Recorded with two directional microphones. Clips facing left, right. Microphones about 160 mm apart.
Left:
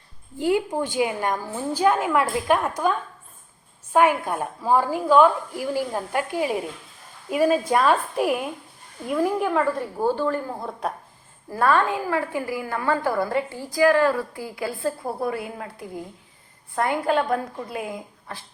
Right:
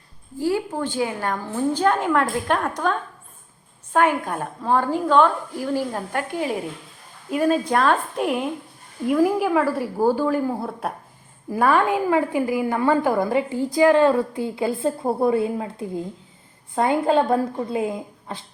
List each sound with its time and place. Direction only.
0.3 s a woman's voice: 20° left (ahead or behind)
3.9 s a woman's voice: 10° left (ahead or behind); by 18.4 s 25° right (ahead or behind)